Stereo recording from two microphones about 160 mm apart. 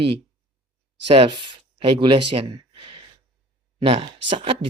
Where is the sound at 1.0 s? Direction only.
35° right (ahead or behind).